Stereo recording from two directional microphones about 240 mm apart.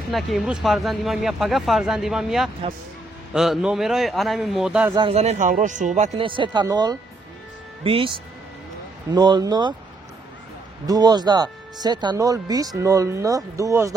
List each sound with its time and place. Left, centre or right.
0.1 s speech: centre
4.9 s speech: right
9.1 s speech: centre
10.9 s speech: centre